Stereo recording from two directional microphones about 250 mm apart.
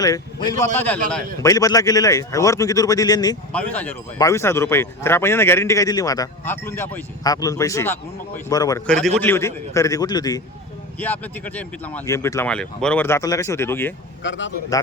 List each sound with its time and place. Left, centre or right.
0.0 s speech: centre
8.9 s a man's voice: centre
14.3 s a man's voice: left